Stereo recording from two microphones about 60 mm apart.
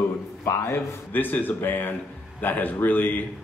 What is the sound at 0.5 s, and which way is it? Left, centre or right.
A man's voice, left.